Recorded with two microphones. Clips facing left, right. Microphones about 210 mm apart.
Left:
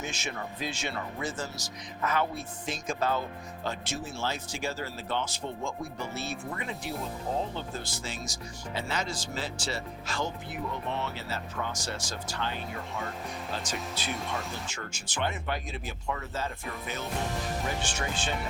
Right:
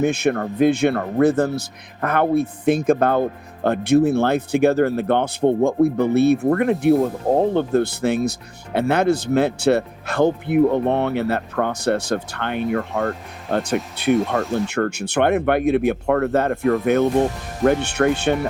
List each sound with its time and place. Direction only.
0.0 s speech: 60° right (ahead or behind)